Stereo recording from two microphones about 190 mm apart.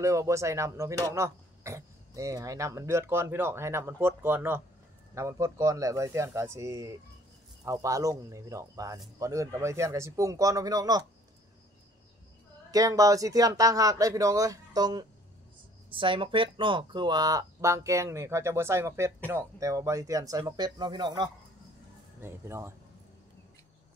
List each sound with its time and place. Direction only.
0.0 s speech: 15° right (ahead or behind)
12.7 s speech: 20° right (ahead or behind)